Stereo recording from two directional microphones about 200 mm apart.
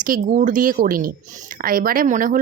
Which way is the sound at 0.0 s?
40° right (ahead or behind).